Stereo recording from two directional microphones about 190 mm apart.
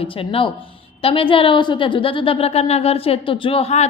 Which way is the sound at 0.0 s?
30° left (ahead or behind).